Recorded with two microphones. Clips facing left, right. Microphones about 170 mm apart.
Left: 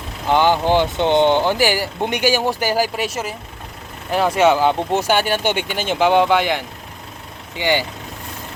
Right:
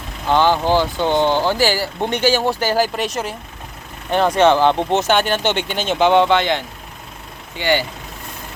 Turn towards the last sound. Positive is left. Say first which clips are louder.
# right 1 dB
turn(degrees=15)  # may be behind; listen again after turning